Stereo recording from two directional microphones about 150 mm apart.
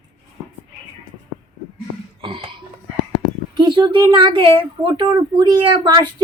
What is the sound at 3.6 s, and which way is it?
Speech, 35° right (ahead or behind).